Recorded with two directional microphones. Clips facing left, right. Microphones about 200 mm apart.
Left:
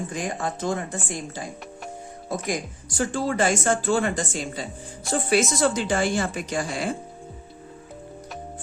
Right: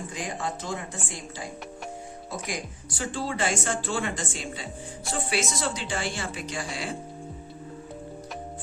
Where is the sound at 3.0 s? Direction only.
45° left (ahead or behind).